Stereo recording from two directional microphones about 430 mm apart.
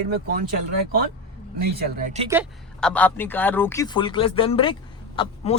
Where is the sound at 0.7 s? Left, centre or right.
Right.